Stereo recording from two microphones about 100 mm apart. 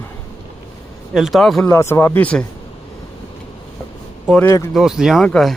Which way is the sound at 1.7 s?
25° left (ahead or behind).